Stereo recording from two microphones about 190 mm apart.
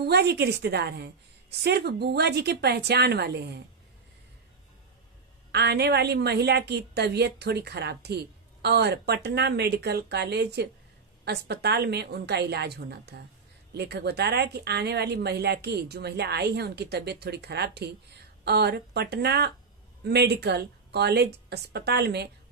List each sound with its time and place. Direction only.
0.0 s a woman's voice: 60° right (ahead or behind)
5.5 s a woman's voice: 60° right (ahead or behind)